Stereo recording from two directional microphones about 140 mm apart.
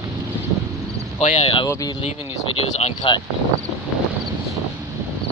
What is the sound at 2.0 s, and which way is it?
Speech, 50° left (ahead or behind).